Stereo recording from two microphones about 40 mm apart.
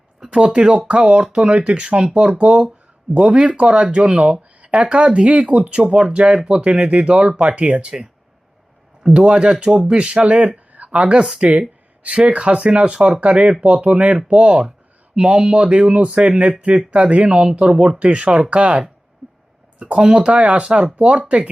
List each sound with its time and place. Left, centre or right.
0.3 s speech: right
3.6 s speech: right
5.9 s speech: right
9.3 s speech: right
14.3 s speech: right
19.8 s speech: right